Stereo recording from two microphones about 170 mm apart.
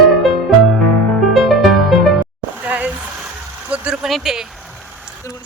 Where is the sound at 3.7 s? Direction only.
5° right (ahead or behind).